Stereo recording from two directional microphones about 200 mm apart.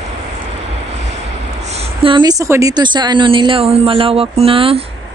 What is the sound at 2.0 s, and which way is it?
A woman's voice, 20° right (ahead or behind).